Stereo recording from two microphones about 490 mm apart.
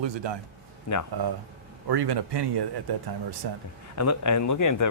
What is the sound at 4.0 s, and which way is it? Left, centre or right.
Speech, left.